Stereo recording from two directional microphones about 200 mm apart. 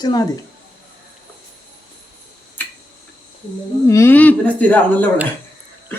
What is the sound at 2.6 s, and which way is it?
Tick-tock, 10° left (ahead or behind).